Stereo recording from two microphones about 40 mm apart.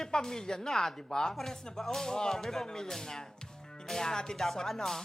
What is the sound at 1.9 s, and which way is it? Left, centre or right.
Music, centre.